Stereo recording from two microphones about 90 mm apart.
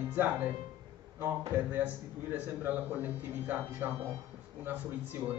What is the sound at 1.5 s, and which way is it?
A man's voice, 20° right (ahead or behind).